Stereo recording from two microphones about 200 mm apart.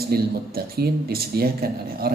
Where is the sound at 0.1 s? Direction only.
50° right (ahead or behind).